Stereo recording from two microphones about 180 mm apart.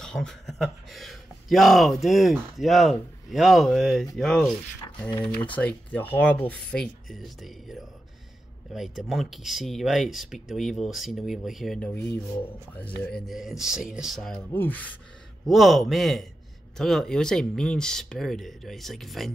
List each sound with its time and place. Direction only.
0.0 s speech: centre (ahead or behind)
5.3 s speech: 25° left (ahead or behind)
5.6 s speech: 5° left (ahead or behind)